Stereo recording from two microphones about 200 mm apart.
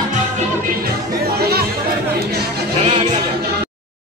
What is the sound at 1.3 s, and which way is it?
Chatter, 50° right (ahead or behind).